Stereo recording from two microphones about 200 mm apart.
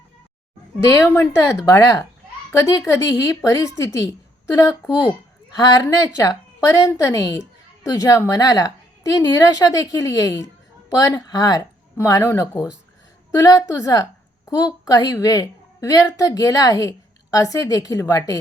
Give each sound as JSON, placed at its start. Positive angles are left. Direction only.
{"t": 0.9, "sound": "a woman's voice", "side_deg": 10}
{"t": 4.9, "sound": "speech", "side_deg": -5}
{"t": 5.5, "sound": "a woman's voice", "side_deg": 15}